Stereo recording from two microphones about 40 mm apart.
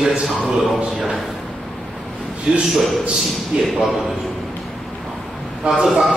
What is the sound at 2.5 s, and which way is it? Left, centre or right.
A man's voice, right.